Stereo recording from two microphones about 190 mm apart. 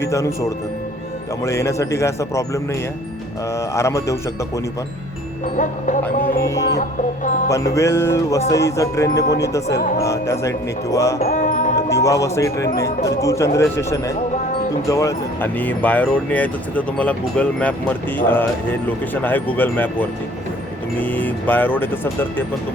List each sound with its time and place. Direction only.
0.0 s speech: 15° left (ahead or behind)
1.5 s speech: 15° left (ahead or behind)
3.8 s speech: 15° left (ahead or behind)
5.5 s speech: 40° left (ahead or behind)
6.4 s speech: 15° left (ahead or behind)
11.3 s music: 45° left (ahead or behind)
11.9 s speech: 15° left (ahead or behind)